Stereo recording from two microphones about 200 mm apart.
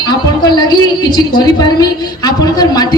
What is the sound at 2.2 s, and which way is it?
Speech, 20° left (ahead or behind).